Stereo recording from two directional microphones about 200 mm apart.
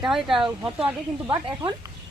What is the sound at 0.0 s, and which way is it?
Speech, centre (ahead or behind).